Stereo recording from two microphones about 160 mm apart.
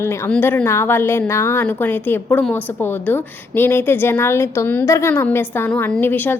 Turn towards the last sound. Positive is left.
turn(degrees=10)  # may be behind; listen again after turning